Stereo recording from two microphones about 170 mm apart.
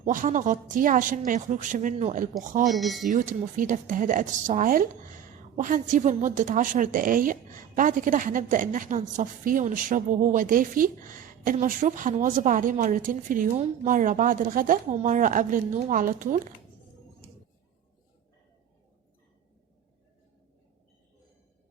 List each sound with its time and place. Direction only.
0.0 s a woman's voice: 50° right (ahead or behind)
2.6 s speech: centre (ahead or behind)
3.1 s a woman's voice: 50° right (ahead or behind)